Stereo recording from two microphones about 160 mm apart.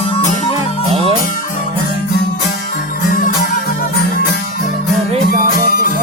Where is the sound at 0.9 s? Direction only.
35° right (ahead or behind).